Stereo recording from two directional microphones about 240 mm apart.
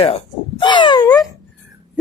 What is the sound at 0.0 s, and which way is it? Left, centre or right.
Speech, left.